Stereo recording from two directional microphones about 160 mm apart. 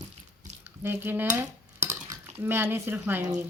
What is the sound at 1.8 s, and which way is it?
Speech, 15° right (ahead or behind).